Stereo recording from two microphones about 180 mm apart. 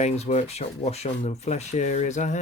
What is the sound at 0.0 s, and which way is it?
Speech, 35° left (ahead or behind).